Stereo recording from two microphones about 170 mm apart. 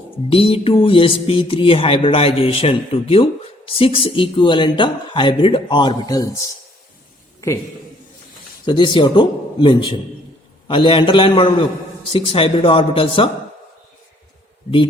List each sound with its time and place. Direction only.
0.3 s speech: 35° left (ahead or behind)
8.6 s a man's voice: 30° left (ahead or behind)